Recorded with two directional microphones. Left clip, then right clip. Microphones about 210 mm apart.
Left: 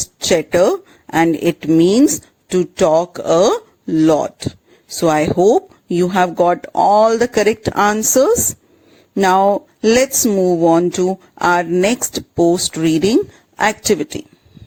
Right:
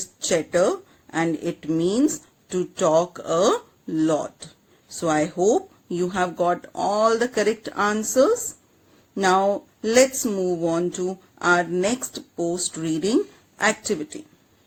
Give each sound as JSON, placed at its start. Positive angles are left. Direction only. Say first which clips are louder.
{"t": 0.0, "sound": "speech", "louder": "left 8 dB", "side_deg": 40}